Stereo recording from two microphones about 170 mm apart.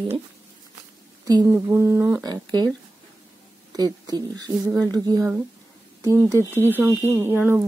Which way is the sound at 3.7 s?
25° right (ahead or behind).